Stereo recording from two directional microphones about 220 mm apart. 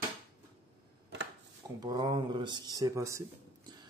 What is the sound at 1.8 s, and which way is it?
Speech, 20° right (ahead or behind).